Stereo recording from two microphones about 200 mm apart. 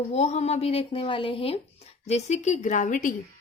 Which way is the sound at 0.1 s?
35° left (ahead or behind).